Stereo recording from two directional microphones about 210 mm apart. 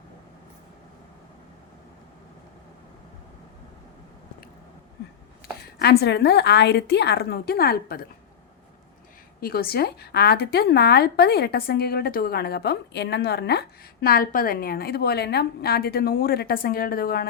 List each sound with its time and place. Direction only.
5.8 s speech: 50° left (ahead or behind)
9.4 s speech: 45° left (ahead or behind)